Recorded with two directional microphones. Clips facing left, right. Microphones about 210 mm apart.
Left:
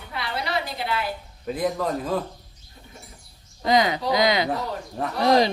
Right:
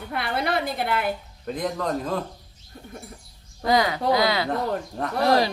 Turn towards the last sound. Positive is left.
turn(degrees=20)  # may be behind; listen again after turning